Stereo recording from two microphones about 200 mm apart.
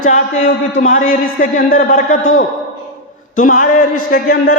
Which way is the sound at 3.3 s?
40° left (ahead or behind).